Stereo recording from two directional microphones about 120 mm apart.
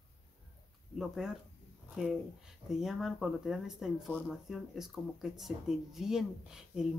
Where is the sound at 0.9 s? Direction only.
5° right (ahead or behind).